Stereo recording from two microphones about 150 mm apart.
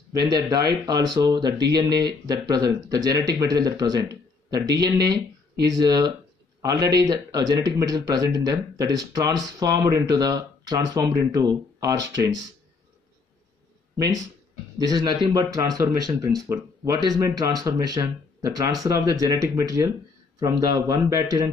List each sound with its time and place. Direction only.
0.2 s speech: 25° right (ahead or behind)
13.9 s speech: 25° right (ahead or behind)